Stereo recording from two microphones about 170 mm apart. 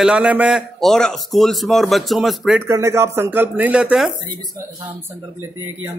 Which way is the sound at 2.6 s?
15° right (ahead or behind).